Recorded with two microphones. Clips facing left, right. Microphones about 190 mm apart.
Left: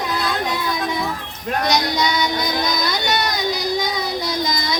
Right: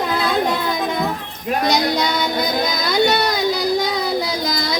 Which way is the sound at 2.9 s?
55° right (ahead or behind).